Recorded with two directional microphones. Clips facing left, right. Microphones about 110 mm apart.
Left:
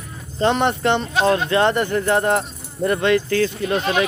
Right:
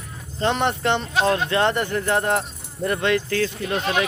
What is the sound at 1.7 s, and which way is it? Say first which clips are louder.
Speech: left 3 dB; 35° left (ahead or behind).